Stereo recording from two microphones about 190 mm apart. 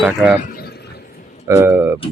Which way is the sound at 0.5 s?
55° left (ahead or behind).